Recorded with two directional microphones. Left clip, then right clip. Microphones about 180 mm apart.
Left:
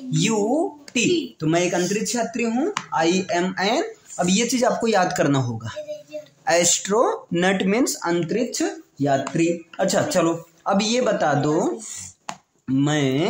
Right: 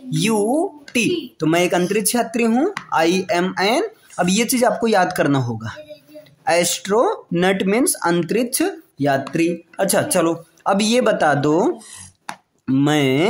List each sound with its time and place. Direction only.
0.1 s speech: 30° right (ahead or behind); by 2.7 s 50° right (ahead or behind)
2.9 s speech: 40° right (ahead or behind)
8.2 s speech: 40° right (ahead or behind)
12.3 s chopping: centre (ahead or behind)
12.6 s speech: 35° right (ahead or behind)